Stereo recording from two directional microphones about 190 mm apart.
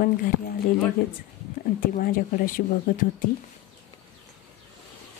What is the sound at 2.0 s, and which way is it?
Speech, 50° left (ahead or behind).